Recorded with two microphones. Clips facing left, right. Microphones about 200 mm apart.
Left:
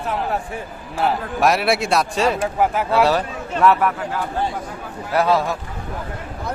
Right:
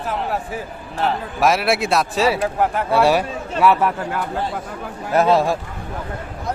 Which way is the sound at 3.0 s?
10° right (ahead or behind).